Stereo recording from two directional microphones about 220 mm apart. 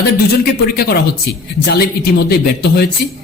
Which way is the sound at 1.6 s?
45° left (ahead or behind).